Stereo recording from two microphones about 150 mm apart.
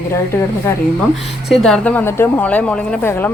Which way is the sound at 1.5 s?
5° left (ahead or behind).